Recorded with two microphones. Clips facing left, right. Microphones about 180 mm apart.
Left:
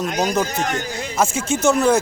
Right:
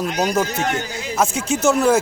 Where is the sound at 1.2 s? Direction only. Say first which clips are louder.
Even; centre (ahead or behind).